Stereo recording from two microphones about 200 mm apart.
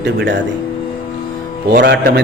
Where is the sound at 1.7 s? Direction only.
55° right (ahead or behind).